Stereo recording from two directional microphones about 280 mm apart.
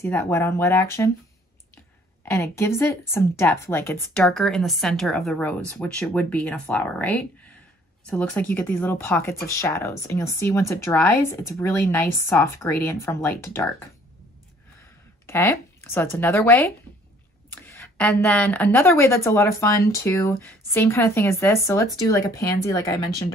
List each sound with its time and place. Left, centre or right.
0.0 s speech: centre
2.2 s a woman's voice: centre
15.2 s speech: centre